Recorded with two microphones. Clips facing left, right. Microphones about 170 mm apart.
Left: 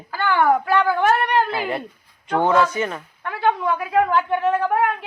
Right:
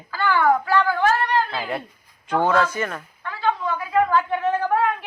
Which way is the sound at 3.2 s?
60° left (ahead or behind).